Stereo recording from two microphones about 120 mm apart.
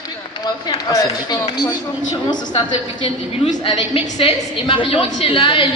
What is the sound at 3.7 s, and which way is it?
A woman's voice, 50° left (ahead or behind).